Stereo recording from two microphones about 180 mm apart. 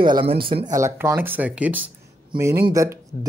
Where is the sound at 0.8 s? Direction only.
15° right (ahead or behind).